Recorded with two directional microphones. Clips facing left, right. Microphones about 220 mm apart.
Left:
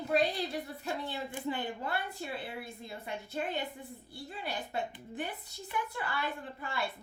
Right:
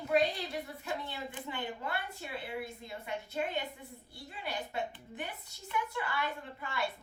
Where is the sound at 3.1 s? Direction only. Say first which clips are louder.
Right 1 dB; 35° left (ahead or behind).